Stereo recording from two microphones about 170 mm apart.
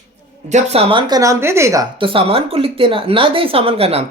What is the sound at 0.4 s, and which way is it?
A woman's voice, 40° right (ahead or behind).